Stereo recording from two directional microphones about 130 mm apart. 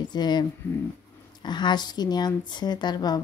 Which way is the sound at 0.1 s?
35° left (ahead or behind).